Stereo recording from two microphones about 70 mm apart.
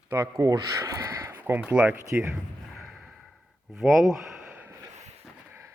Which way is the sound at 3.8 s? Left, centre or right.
Centre.